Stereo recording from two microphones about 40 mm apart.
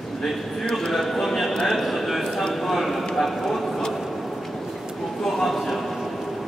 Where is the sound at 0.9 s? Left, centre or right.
Centre.